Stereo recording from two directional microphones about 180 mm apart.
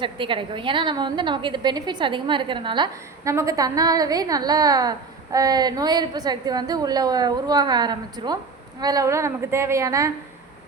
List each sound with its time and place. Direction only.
0.0 s a woman's voice: 30° right (ahead or behind)